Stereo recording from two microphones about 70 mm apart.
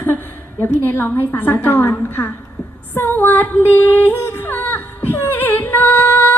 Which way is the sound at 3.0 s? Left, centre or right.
Left.